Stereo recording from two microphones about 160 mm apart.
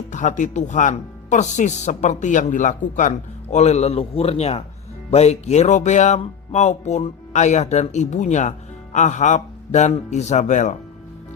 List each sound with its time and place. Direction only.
0.1 s speech: 50° left (ahead or behind)